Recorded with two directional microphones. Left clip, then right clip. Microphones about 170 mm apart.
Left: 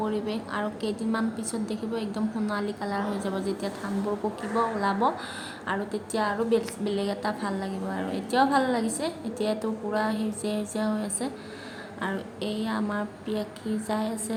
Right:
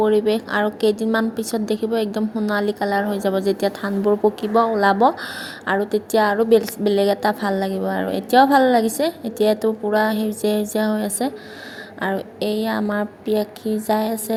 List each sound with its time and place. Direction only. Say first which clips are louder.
0.0 s a woman's voice: right 13 dB; 40° right (ahead or behind)